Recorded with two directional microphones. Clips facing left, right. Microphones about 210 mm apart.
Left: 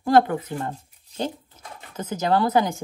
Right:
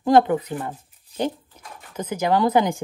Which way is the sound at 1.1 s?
15° right (ahead or behind).